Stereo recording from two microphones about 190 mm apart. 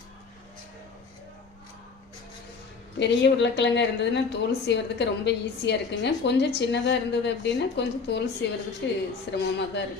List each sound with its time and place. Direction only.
3.0 s speech: 65° left (ahead or behind)